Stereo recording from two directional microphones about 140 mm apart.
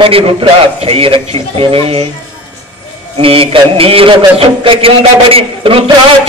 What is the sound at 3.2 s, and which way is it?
A man's voice, 40° right (ahead or behind).